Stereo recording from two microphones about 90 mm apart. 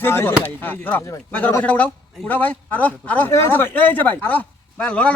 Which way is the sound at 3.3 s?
25° left (ahead or behind).